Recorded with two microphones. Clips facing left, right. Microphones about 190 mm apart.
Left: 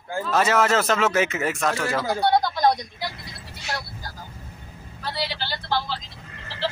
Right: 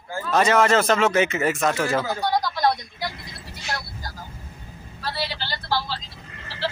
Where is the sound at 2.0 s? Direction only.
35° left (ahead or behind).